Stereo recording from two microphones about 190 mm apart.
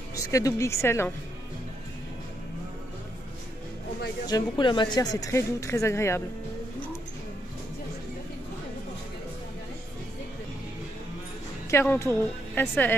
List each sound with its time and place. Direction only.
0.1 s a woman's voice: 15° left (ahead or behind)
4.3 s a woman's voice: 25° left (ahead or behind)
11.7 s a woman's voice: 10° left (ahead or behind)